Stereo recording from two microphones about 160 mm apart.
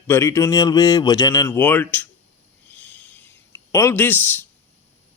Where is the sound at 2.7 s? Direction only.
10° left (ahead or behind).